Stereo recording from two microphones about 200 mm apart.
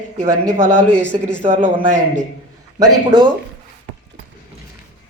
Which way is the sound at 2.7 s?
20° right (ahead or behind).